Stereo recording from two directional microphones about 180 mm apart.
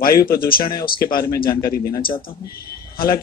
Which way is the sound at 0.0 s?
55° left (ahead or behind).